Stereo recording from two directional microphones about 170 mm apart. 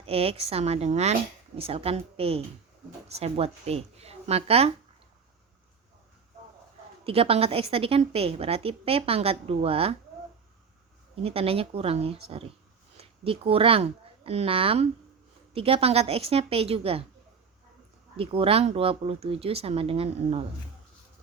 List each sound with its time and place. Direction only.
0.0 s a woman's voice: 35° right (ahead or behind)
7.0 s a woman's voice: 35° right (ahead or behind)
11.1 s a woman's voice: 35° right (ahead or behind)
18.2 s a woman's voice: 30° right (ahead or behind)